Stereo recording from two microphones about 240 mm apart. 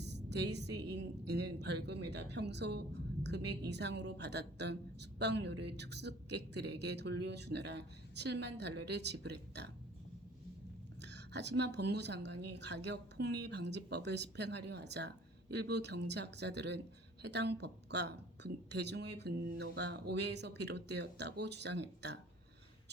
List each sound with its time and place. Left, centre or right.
0.0 s a woman's voice: right
11.0 s a woman's voice: right